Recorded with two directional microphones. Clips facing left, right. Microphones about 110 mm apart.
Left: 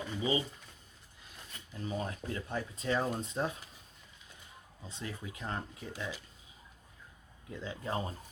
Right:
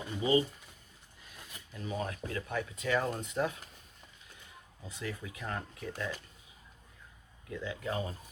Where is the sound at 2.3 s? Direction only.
30° left (ahead or behind).